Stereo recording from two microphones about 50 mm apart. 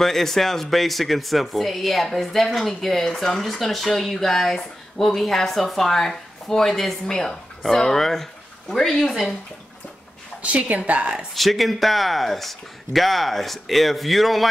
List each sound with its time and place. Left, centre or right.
0.0 s speech: centre
10.4 s speech: right
11.3 s speech: centre